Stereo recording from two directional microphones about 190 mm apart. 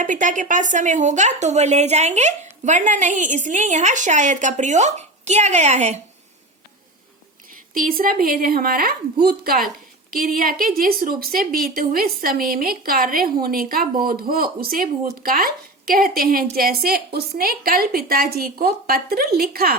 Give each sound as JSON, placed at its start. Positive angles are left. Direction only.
{"t": 0.0, "sound": "speech", "side_deg": -40}
{"t": 7.7, "sound": "speech", "side_deg": -50}